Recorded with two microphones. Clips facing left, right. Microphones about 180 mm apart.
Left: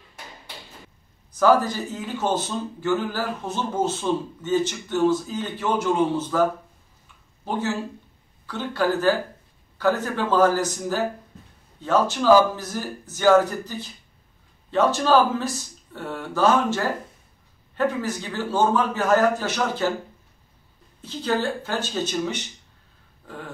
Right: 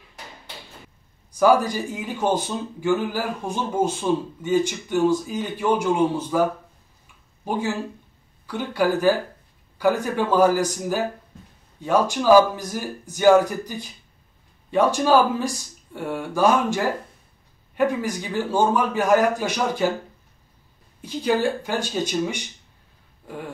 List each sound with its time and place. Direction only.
1.3 s speech: 10° right (ahead or behind)
21.0 s speech: 10° right (ahead or behind)
23.2 s dog: 15° right (ahead or behind)